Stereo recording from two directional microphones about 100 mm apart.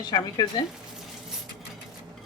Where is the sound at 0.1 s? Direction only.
55° left (ahead or behind).